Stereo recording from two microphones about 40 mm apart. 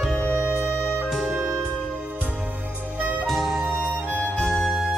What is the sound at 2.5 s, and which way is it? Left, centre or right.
Music, right.